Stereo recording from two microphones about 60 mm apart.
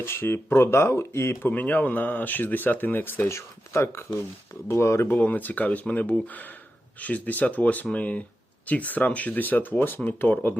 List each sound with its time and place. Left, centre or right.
0.0 s speech: left
1.4 s speech: left
3.2 s speech: left
5.0 s speech: left